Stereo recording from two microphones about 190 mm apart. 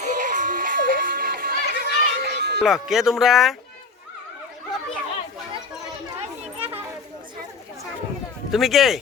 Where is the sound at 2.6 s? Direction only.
Centre (ahead or behind).